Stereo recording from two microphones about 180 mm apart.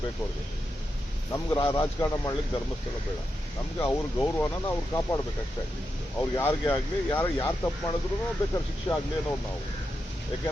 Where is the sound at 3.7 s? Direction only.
15° left (ahead or behind).